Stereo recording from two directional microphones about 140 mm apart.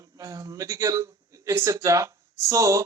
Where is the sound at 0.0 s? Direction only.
25° right (ahead or behind).